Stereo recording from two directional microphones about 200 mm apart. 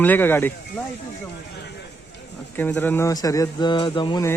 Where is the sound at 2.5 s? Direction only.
10° left (ahead or behind).